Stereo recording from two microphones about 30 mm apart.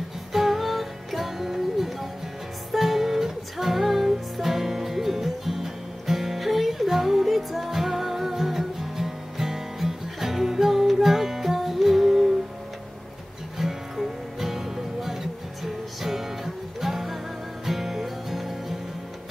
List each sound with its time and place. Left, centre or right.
0.3 s music: centre
13.6 s music: centre